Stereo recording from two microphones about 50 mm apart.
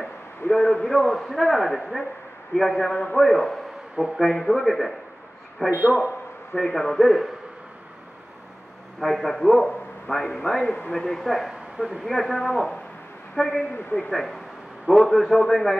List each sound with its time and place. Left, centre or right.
0.4 s a sound: left
0.8 s a man's voice: centre
2.9 s a man's voice: left
3.2 s a man's voice: centre
5.7 s a man's voice: right
6.6 s a man's voice: centre
9.0 s a man's voice: centre
10.9 s a man's voice: centre
11.1 s a man's voice: centre